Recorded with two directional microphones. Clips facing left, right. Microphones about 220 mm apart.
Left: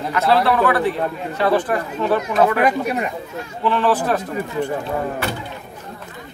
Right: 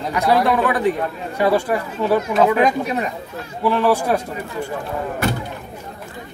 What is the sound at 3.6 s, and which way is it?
Speech, 10° right (ahead or behind).